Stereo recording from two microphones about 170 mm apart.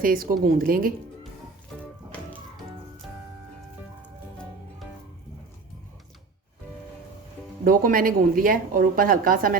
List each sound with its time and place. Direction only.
0.0 s speech: 55° right (ahead or behind)
7.6 s speech: 55° right (ahead or behind)